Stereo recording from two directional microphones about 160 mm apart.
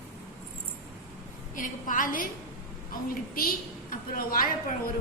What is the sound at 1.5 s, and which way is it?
A woman's voice, 55° left (ahead or behind).